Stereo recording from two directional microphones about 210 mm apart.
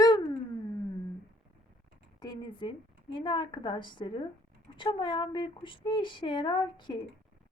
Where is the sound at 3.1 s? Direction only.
25° left (ahead or behind).